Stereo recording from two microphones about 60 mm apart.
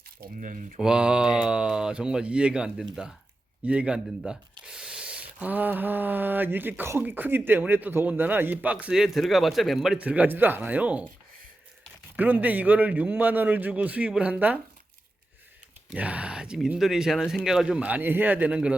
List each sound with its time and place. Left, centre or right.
0.8 s speech: centre
4.3 s a sound: centre
5.5 s speech: right
8.9 s speech: centre
10.0 s a man's voice: right
12.1 s a man's voice: right
16.0 s speech: right; by 17.7 s centre
17.7 s a man's voice: right